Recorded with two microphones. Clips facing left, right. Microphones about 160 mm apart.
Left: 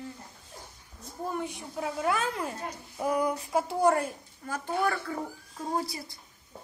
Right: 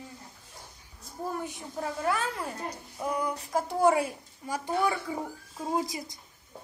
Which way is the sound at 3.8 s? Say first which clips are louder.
Right 2 dB; 5° right (ahead or behind).